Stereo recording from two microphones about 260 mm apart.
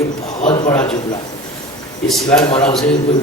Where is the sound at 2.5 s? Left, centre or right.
Left.